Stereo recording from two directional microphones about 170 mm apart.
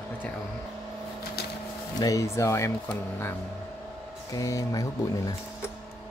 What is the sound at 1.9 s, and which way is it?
Speech, 20° left (ahead or behind).